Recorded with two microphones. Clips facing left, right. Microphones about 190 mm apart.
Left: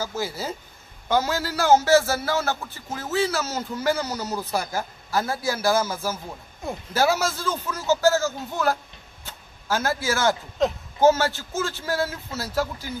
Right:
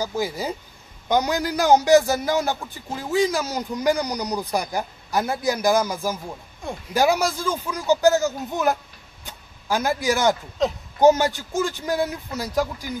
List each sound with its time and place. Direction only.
0.0 s a man's voice: 15° right (ahead or behind)
9.2 s a sound: 15° right (ahead or behind)
10.6 s speech: centre (ahead or behind)
11.0 s a man's voice: 15° right (ahead or behind)